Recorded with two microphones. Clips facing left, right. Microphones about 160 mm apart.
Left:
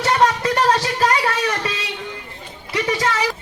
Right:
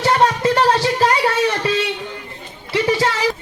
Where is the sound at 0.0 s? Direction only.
25° right (ahead or behind).